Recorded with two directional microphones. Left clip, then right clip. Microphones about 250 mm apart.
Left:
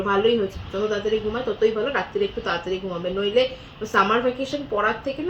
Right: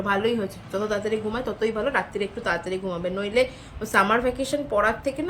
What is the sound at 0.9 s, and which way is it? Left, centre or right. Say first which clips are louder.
A woman's voice: left 3 dB; right.